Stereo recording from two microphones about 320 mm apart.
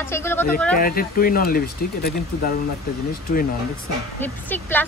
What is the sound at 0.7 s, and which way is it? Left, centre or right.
Speech, left.